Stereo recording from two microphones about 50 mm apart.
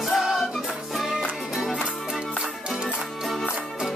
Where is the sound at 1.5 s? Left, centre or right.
Centre.